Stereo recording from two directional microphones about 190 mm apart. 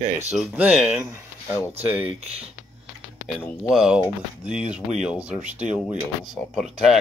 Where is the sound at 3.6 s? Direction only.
5° right (ahead or behind).